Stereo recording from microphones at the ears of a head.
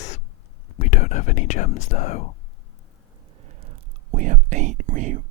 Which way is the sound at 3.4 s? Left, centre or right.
Right.